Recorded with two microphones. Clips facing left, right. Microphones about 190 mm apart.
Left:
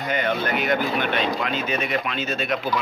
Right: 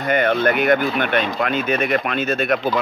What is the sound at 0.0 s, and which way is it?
Speech, 55° right (ahead or behind).